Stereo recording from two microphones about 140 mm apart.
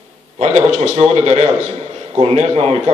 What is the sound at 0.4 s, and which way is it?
A man's voice, 55° right (ahead or behind).